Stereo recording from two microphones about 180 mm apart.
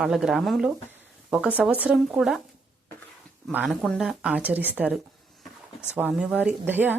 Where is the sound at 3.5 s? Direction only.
5° right (ahead or behind).